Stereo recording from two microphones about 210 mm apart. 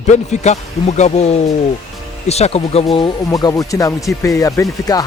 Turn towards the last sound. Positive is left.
turn(degrees=15)  # may be behind; listen again after turning